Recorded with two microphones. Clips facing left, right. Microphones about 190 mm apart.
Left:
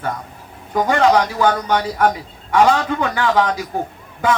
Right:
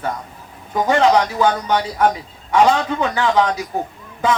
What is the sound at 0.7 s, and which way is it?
A man's voice, 25° right (ahead or behind).